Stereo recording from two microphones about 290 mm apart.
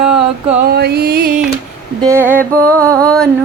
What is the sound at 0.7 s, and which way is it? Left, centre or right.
Music, right.